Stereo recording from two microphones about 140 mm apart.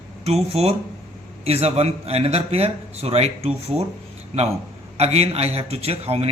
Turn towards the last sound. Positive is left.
turn(degrees=-45)  # may be behind; listen again after turning